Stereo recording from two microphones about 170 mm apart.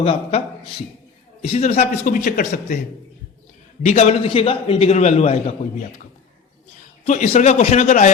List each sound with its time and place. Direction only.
0.0 s a man's voice: 35° left (ahead or behind)
3.8 s a man's voice: 40° left (ahead or behind)
7.0 s a man's voice: 40° left (ahead or behind)